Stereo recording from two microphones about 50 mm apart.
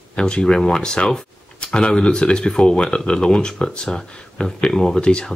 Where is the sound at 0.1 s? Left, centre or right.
Centre.